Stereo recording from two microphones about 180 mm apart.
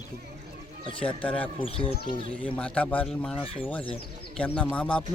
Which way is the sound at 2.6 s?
5° left (ahead or behind).